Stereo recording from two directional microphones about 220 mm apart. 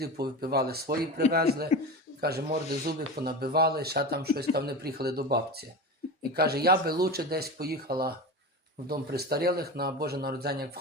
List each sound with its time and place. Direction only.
0.0 s speech: 45° right (ahead or behind)